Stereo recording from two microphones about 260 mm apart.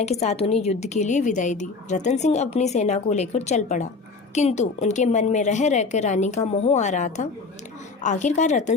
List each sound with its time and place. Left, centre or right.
0.0 s a woman's voice: left